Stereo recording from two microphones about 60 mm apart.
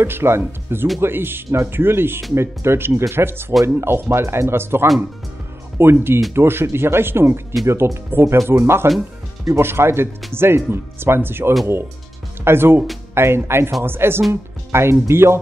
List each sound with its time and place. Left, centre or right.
0.0 s speech: right